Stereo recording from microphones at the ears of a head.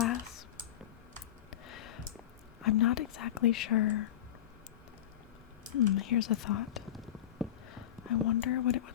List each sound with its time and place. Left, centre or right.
0.0 s computer keyboard: left
1.5 s a sound: left
2.6 s speech: left
5.7 s speech: left